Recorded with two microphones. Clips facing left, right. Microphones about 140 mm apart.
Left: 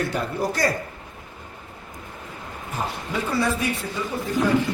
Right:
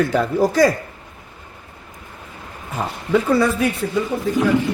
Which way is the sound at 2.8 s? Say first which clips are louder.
Right 3 dB; 75° right (ahead or behind).